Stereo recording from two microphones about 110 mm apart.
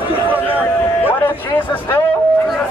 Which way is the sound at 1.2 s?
15° left (ahead or behind).